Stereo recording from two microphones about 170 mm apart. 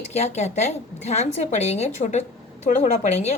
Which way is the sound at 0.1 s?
40° left (ahead or behind).